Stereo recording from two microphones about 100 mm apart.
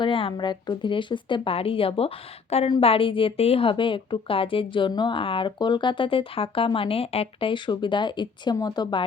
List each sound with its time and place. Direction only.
0.0 s a woman's voice: 60° left (ahead or behind); by 2.7 s 80° left
2.8 s a woman's voice: 65° left (ahead or behind); by 9.0 s 50° left (ahead or behind)